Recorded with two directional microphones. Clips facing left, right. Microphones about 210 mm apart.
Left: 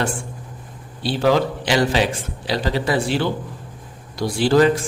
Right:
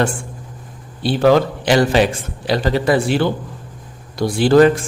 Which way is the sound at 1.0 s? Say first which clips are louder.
Right 4 dB; 55° right (ahead or behind).